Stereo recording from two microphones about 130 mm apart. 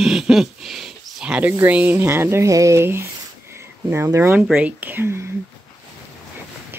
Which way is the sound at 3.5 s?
20° right (ahead or behind).